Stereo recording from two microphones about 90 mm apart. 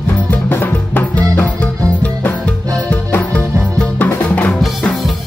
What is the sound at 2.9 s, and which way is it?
Music, 15° left (ahead or behind).